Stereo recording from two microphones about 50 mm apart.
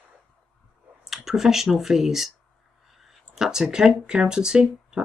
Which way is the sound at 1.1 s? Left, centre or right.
Centre.